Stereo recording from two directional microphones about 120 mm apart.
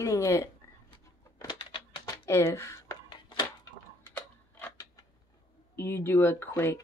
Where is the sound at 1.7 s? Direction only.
35° left (ahead or behind).